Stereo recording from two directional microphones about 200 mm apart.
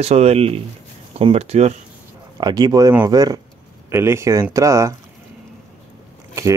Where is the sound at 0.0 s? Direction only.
30° right (ahead or behind).